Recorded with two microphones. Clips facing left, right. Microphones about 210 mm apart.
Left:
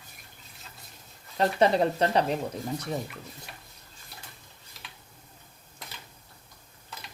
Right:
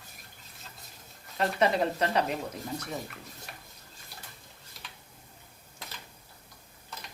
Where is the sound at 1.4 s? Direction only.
30° left (ahead or behind).